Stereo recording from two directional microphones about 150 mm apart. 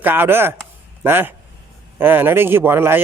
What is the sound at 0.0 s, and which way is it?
Speech, 15° right (ahead or behind).